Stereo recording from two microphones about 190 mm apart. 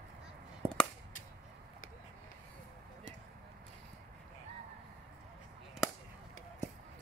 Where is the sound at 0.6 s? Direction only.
30° right (ahead or behind).